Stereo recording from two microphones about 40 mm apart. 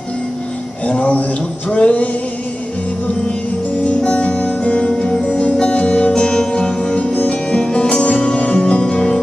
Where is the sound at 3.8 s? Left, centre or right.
Left.